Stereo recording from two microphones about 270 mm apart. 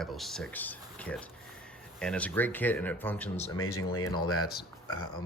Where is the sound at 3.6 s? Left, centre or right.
Left.